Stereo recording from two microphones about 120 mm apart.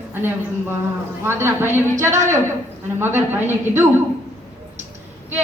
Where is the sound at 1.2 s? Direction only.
20° right (ahead or behind).